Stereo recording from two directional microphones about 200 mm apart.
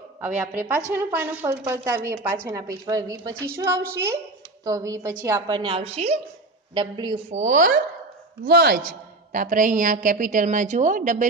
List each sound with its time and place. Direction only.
0.2 s a woman's voice: 5° right (ahead or behind); by 7.7 s 40° right (ahead or behind)
8.5 s speech: 55° right (ahead or behind)
9.3 s a woman's voice: 45° right (ahead or behind)